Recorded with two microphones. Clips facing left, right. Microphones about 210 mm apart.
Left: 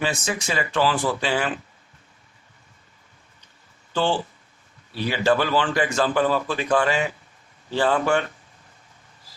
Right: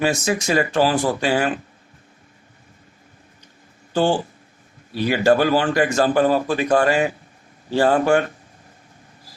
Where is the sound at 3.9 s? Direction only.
45° right (ahead or behind).